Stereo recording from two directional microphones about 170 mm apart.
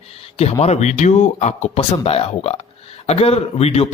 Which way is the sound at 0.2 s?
35° left (ahead or behind).